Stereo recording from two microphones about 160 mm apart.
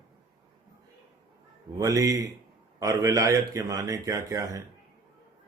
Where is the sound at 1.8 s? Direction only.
20° right (ahead or behind).